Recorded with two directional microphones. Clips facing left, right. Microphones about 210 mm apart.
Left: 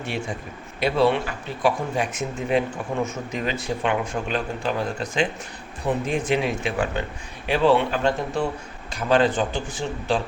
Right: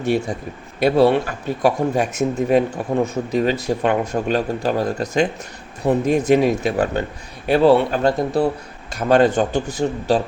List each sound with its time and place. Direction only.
0.0 s speech: 40° right (ahead or behind)